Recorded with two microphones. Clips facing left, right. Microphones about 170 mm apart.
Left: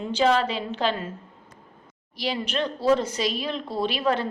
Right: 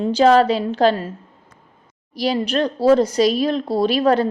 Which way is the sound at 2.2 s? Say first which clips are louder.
Right 8 dB; 40° right (ahead or behind).